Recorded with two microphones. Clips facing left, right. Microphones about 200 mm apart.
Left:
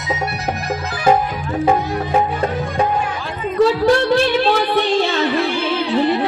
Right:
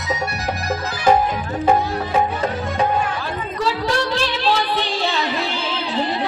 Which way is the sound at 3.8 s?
55° left (ahead or behind).